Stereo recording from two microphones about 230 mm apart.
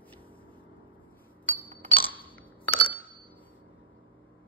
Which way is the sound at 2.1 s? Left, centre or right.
Centre.